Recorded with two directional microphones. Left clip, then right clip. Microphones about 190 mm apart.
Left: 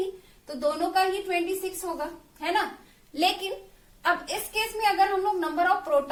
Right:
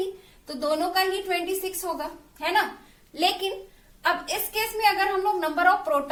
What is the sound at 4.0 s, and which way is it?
A woman's voice, 10° left (ahead or behind).